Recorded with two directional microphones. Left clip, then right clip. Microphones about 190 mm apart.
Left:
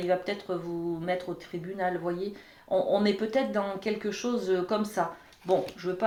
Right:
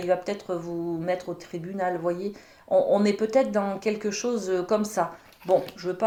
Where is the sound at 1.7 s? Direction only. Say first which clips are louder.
Right 4 dB; 45° right (ahead or behind).